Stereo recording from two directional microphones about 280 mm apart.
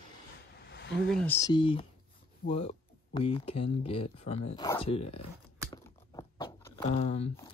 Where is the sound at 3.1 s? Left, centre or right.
Centre.